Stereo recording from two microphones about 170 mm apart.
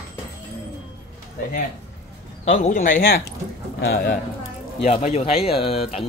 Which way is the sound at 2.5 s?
50° left (ahead or behind).